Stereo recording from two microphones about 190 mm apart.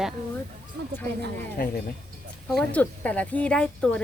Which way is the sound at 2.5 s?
5° left (ahead or behind).